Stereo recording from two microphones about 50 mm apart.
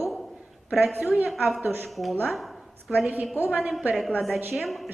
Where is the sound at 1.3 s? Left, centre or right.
Centre.